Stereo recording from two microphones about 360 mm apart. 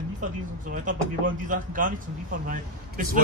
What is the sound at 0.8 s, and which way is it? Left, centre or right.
A man's voice, right.